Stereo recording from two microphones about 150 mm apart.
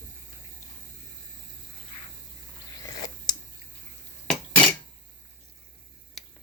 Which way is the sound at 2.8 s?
25° left (ahead or behind).